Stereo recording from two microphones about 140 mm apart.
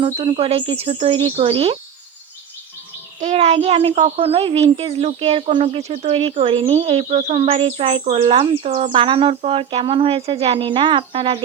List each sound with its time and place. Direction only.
0.0 s speech: 45° right (ahead or behind)
3.2 s speech: 55° right (ahead or behind); by 11.3 s 40° right (ahead or behind)